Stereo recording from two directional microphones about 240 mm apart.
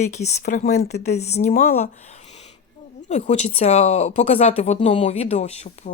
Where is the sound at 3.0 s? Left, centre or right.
Left.